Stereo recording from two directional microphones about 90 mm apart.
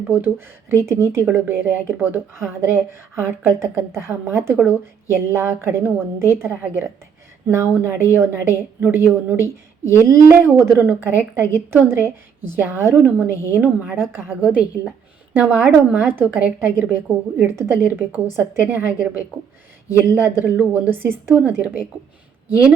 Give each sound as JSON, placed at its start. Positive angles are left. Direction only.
{"t": 0.2, "sound": "speech", "side_deg": -30}